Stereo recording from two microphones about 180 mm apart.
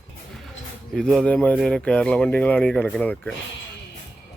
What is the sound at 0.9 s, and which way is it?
Speech, 5° left (ahead or behind).